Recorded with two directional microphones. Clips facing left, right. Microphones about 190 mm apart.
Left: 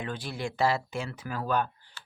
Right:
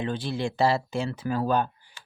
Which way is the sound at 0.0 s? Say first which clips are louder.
Right 6 dB; 25° right (ahead or behind).